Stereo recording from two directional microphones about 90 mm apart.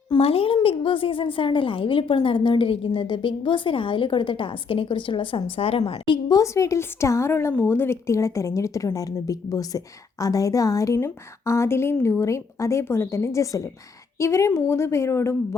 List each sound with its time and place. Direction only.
0.2 s a woman's voice: 90° left
6.2 s speech: 40° left (ahead or behind)